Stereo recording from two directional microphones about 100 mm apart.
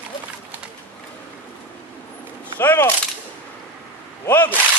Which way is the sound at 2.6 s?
20° left (ahead or behind).